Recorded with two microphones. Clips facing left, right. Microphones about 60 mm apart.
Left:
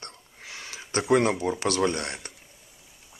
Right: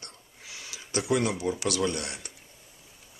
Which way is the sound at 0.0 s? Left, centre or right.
Left.